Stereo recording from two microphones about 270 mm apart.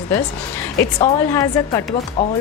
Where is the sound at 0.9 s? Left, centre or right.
Centre.